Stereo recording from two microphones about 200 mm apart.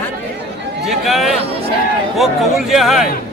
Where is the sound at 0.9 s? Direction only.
Centre (ahead or behind).